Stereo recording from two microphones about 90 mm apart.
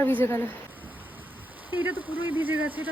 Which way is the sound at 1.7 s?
20° right (ahead or behind).